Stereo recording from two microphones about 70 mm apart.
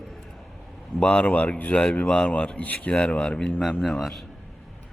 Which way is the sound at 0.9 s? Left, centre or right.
Centre.